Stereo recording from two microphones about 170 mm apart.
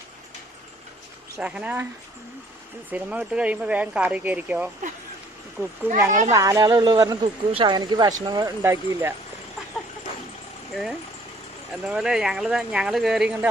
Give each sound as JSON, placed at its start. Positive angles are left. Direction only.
{"t": 1.4, "sound": "speech", "side_deg": -5}
{"t": 2.9, "sound": "speech", "side_deg": -10}
{"t": 6.1, "sound": "speech", "side_deg": -45}
{"t": 6.3, "sound": "speech", "side_deg": -20}
{"t": 11.9, "sound": "speech", "side_deg": -5}